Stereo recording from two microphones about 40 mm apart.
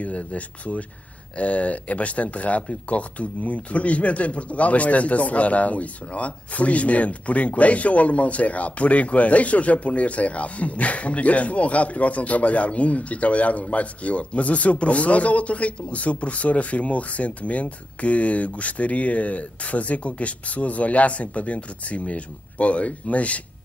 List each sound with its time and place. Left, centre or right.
0.0 s speech: left